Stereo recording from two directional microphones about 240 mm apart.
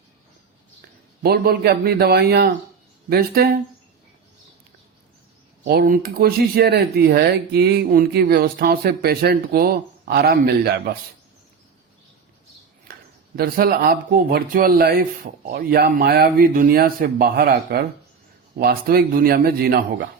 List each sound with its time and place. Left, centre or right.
1.2 s speech: right
5.6 s speech: right
12.9 s speech: right